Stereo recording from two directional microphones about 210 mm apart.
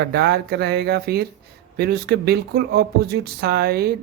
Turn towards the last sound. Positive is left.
turn(degrees=-50)  # may be behind; listen again after turning